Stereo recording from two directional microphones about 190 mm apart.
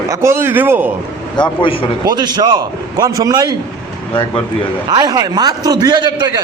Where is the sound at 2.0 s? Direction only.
20° right (ahead or behind).